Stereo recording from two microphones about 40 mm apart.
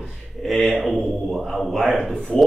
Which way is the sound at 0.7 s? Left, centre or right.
Centre.